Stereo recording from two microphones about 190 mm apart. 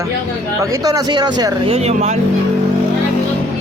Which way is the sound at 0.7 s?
20° right (ahead or behind).